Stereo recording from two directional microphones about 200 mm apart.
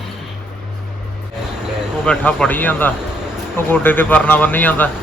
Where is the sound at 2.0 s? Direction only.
5° left (ahead or behind).